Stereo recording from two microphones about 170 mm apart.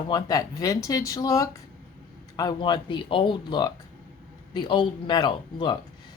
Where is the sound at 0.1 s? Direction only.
25° left (ahead or behind).